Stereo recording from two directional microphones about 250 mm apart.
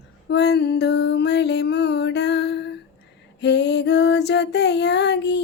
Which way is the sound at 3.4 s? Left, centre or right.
Left.